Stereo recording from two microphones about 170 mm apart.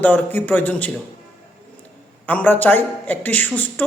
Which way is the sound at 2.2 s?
10° left (ahead or behind).